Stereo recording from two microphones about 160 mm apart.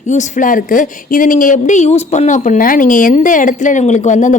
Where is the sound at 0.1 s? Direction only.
50° left (ahead or behind).